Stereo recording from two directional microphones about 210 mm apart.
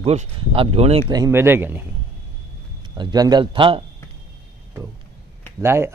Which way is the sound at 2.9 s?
20° right (ahead or behind).